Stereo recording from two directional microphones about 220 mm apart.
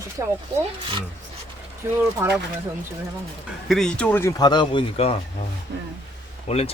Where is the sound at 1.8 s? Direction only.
15° right (ahead or behind).